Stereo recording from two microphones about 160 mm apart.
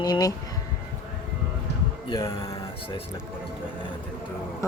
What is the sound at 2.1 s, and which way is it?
Speech, 20° left (ahead or behind).